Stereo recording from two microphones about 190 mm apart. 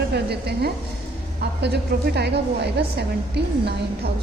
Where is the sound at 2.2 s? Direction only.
60° right (ahead or behind).